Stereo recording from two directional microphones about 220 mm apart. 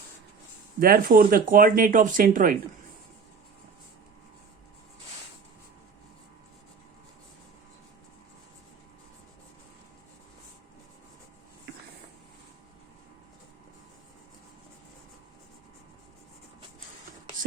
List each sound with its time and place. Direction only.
0.8 s speech: 40° right (ahead or behind)